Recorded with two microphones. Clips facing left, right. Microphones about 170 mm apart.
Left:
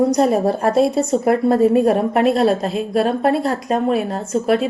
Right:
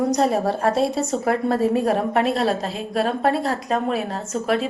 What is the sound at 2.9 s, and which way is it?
A woman's voice, 40° left (ahead or behind).